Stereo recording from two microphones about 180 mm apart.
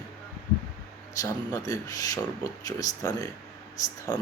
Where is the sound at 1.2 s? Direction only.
20° left (ahead or behind).